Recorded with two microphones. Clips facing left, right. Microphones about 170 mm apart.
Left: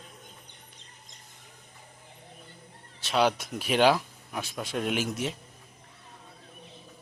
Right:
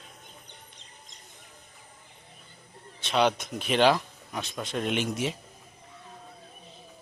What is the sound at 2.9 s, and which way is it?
Speech, 5° left (ahead or behind).